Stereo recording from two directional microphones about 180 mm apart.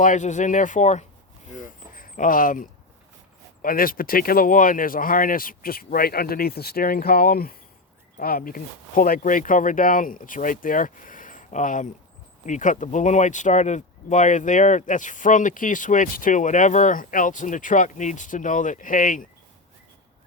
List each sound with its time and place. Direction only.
0.0 s speech: 45° left (ahead or behind)
1.9 s a sound: 50° left (ahead or behind)
3.6 s speech: 50° left (ahead or behind)